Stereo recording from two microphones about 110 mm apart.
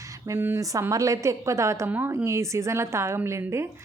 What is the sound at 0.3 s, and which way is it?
A woman's voice, 20° right (ahead or behind).